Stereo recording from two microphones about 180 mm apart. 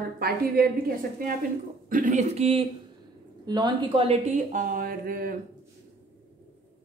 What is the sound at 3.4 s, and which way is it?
A woman's voice, 25° right (ahead or behind).